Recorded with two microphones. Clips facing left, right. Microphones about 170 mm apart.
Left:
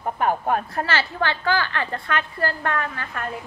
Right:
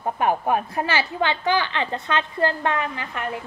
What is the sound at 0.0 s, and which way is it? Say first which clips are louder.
A woman's voice: right 1 dB; 20° right (ahead or behind).